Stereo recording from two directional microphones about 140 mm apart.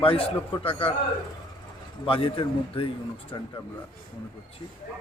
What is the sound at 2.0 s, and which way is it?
Speech, 40° left (ahead or behind).